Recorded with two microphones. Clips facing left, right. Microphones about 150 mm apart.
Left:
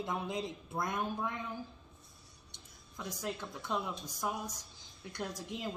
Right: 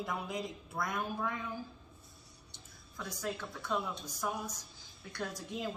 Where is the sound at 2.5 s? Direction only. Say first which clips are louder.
Even; 20° left (ahead or behind).